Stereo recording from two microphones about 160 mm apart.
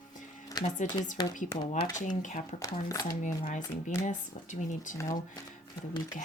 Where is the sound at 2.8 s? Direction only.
25° left (ahead or behind).